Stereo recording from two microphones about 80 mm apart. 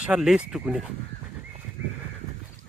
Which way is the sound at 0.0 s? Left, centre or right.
Centre.